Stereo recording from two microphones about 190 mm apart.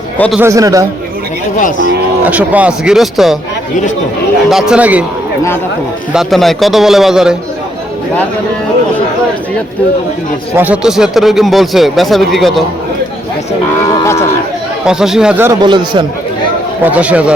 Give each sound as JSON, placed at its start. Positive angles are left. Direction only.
{"t": 0.3, "sound": "a man's voice", "side_deg": -15}
{"t": 1.5, "sound": "speech", "side_deg": 45}
{"t": 2.2, "sound": "a man's voice", "side_deg": -5}
{"t": 4.4, "sound": "a man's voice", "side_deg": 0}
{"t": 6.1, "sound": "a man's voice", "side_deg": 0}
{"t": 10.6, "sound": "a man's voice", "side_deg": -5}
{"t": 13.9, "sound": "cattle", "side_deg": 15}
{"t": 14.8, "sound": "a man's voice", "side_deg": -5}
{"t": 15.6, "sound": "a man's voice", "side_deg": -25}
{"t": 16.8, "sound": "a man's voice", "side_deg": -5}